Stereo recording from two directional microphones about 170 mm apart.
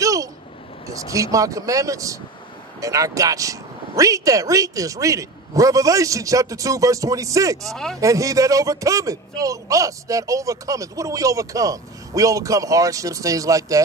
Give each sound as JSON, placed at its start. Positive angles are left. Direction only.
{"t": 0.0, "sound": "a sound", "side_deg": -20}
{"t": 0.8, "sound": "a man's voice", "side_deg": -20}
{"t": 7.6, "sound": "speech", "side_deg": 0}
{"t": 8.0, "sound": "a man's voice", "side_deg": -20}